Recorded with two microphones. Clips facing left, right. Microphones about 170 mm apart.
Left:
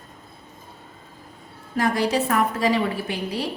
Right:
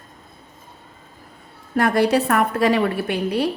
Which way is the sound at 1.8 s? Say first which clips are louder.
Right 4 dB; 60° right (ahead or behind).